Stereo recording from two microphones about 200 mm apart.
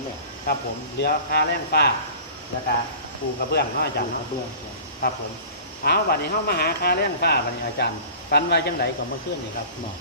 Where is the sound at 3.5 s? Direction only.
50° left (ahead or behind).